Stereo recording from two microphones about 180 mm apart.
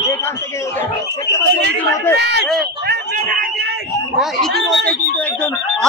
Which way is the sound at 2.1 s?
65° right (ahead or behind).